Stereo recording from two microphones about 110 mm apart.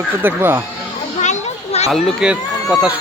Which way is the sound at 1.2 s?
85° left.